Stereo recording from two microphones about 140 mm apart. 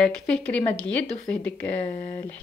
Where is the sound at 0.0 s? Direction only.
5° left (ahead or behind).